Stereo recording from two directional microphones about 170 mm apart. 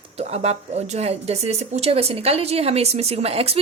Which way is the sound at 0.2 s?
40° right (ahead or behind).